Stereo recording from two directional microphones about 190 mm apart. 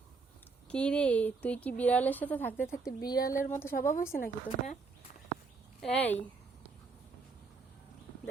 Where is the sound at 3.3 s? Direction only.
45° left (ahead or behind).